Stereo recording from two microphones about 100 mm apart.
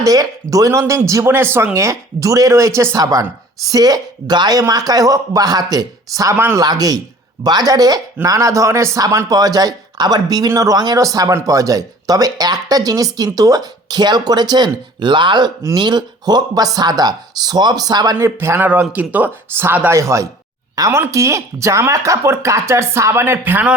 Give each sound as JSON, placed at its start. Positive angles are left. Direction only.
{"t": 0.0, "sound": "speech", "side_deg": -35}
{"t": 18.3, "sound": "speech", "side_deg": -25}
{"t": 20.0, "sound": "speech", "side_deg": -30}